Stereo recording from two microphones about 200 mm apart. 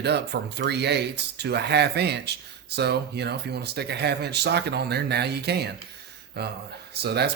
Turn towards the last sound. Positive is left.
turn(degrees=-55)  # may be behind; listen again after turning